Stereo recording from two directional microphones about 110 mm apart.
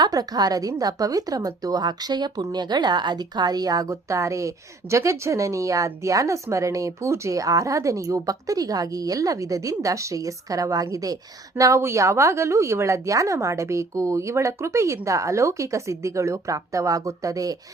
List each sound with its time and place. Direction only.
0.0 s a woman's voice: 35° right (ahead or behind)